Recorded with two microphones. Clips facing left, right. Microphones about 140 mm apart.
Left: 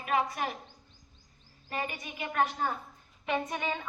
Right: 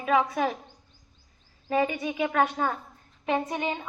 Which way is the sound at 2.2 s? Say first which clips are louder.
Right 4 dB; 85° right.